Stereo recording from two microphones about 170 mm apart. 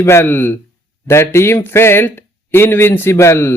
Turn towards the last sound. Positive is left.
turn(degrees=15)  # may be behind; listen again after turning